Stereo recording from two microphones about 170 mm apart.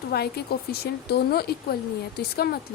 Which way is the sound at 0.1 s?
70° left (ahead or behind).